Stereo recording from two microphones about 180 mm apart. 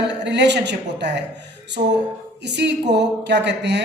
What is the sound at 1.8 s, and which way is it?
Speech, 45° right (ahead or behind).